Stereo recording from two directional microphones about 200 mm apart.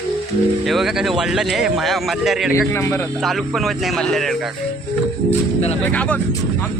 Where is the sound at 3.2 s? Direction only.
Centre (ahead or behind).